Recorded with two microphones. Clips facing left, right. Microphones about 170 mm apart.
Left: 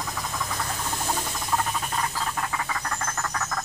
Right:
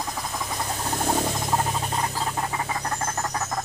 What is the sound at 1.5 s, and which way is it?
Rodents, 25° right (ahead or behind).